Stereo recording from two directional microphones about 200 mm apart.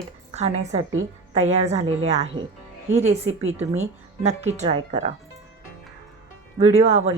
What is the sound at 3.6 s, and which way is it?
Speech, 35° right (ahead or behind).